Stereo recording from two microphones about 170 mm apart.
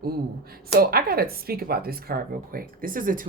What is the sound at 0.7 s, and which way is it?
Speech, 65° right (ahead or behind).